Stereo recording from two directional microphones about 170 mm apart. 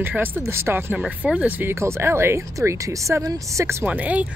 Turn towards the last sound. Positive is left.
turn(degrees=-10)  # may be behind; listen again after turning